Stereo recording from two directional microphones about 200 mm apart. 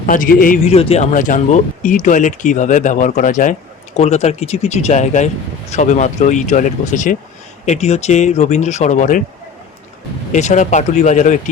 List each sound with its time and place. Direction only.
0.0 s a man's voice: 40° left (ahead or behind)
10.3 s a man's voice: 35° left (ahead or behind)